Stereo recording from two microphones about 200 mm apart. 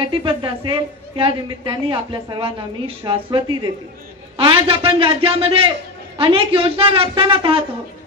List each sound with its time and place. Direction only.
0.0 s a woman's voice: 25° right (ahead or behind)